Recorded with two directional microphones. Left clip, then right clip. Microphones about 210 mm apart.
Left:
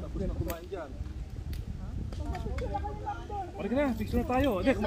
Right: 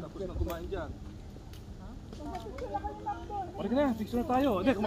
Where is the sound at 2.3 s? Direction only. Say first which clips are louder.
Left 1 dB; 50° left (ahead or behind).